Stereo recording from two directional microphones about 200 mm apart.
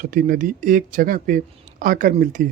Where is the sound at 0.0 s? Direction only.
45° right (ahead or behind).